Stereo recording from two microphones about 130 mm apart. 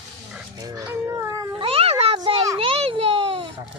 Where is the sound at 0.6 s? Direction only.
30° right (ahead or behind).